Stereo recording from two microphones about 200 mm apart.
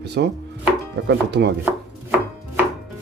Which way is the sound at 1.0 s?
60° right (ahead or behind).